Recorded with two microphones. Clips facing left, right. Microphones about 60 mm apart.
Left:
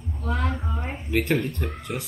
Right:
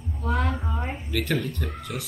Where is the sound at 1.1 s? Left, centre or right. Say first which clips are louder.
Left 4 dB; left.